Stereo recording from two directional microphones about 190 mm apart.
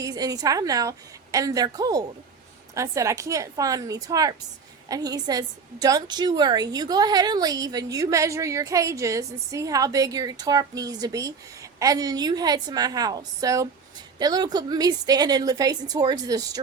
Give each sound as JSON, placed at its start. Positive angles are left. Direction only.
{"t": 0.0, "sound": "a woman's voice", "side_deg": -20}